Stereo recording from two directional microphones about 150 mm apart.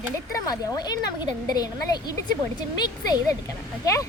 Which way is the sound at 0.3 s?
25° left (ahead or behind).